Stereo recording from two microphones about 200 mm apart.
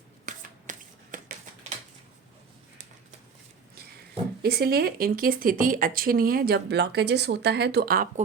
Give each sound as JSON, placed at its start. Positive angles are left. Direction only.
{"t": 0.3, "sound": "finger snapping", "side_deg": -40}
{"t": 4.4, "sound": "speech", "side_deg": -50}